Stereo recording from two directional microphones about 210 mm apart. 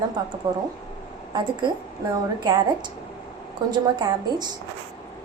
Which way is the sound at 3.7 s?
20° right (ahead or behind).